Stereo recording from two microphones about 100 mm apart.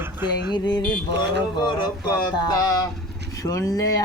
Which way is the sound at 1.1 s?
50° left (ahead or behind).